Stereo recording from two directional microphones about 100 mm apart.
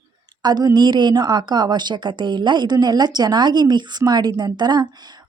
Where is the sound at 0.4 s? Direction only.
45° right (ahead or behind).